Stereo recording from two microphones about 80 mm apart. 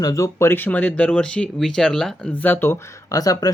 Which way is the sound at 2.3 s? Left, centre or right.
Left.